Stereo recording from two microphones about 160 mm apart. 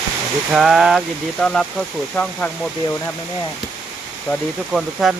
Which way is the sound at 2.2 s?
15° left (ahead or behind).